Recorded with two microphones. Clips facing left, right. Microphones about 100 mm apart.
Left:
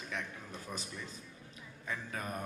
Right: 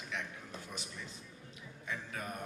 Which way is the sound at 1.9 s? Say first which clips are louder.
Left 1 dB; 40° left (ahead or behind).